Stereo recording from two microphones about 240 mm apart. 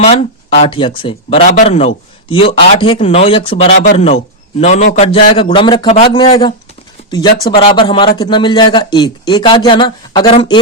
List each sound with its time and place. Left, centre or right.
0.1 s speech: left
7.5 s speech: left